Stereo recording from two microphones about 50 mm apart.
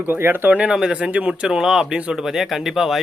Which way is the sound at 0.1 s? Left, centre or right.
Right.